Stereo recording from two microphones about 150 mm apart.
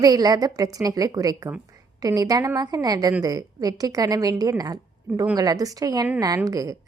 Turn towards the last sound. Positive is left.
turn(degrees=-25)  # may be behind; listen again after turning